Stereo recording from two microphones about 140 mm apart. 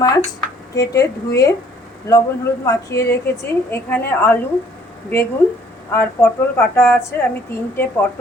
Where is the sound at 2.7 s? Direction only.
20° left (ahead or behind).